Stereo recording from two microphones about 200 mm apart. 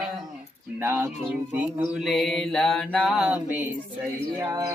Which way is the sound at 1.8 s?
Centre (ahead or behind).